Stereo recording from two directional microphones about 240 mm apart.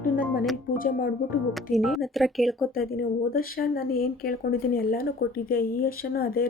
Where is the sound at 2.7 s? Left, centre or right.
Left.